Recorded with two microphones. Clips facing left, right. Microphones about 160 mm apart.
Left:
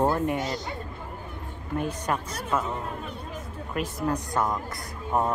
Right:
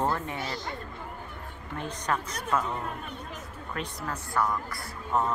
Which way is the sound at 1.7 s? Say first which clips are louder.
Left 3 dB; 10° left (ahead or behind).